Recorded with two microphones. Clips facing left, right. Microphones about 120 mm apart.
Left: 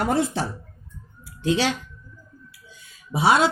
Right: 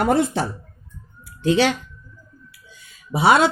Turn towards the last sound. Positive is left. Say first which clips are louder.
# right 3 dB
turn(degrees=-65)  # may be behind; listen again after turning